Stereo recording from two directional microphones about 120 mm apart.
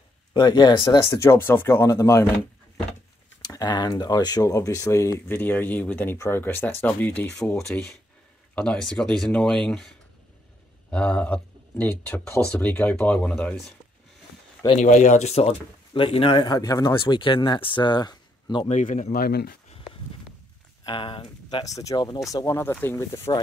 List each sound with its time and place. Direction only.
0.3 s speech: 35° left (ahead or behind)
1.2 s speech: 20° left (ahead or behind)
3.4 s speech: 35° left (ahead or behind); by 7.5 s 15° left (ahead or behind)
7.5 s speech: 5° left (ahead or behind)
10.9 s speech: 10° left (ahead or behind)
14.8 s speech: 85° left; by 16.9 s 30° left (ahead or behind)
16.9 s speech: 45° left (ahead or behind)
18.7 s speech: 90° left
20.8 s speech: 45° left (ahead or behind)
21.6 s speech: 30° left (ahead or behind)